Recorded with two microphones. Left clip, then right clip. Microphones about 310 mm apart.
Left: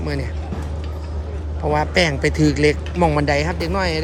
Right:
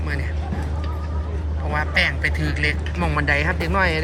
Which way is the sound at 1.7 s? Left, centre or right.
Left.